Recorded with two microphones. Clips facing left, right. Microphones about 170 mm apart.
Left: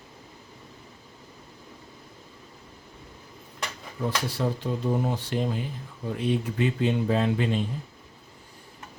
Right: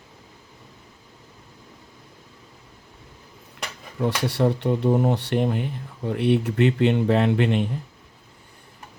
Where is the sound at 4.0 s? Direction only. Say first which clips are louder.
Right 6 dB; 70° right (ahead or behind).